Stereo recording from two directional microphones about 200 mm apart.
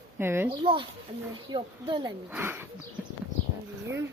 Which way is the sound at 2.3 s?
10° right (ahead or behind).